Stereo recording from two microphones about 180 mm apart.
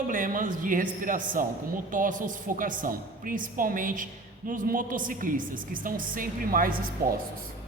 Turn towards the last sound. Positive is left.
turn(degrees=-55)  # may be behind; listen again after turning